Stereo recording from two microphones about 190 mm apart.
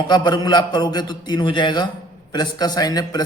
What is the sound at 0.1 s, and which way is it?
A man's voice, 20° left (ahead or behind).